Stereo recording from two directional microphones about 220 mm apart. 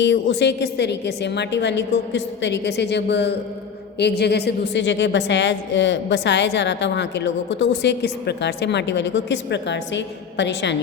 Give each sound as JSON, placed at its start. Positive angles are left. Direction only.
{"t": 0.0, "sound": "a woman's voice", "side_deg": 50}